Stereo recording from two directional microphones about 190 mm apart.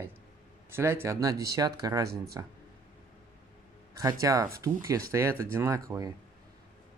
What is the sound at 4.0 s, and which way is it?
Speech, 15° right (ahead or behind).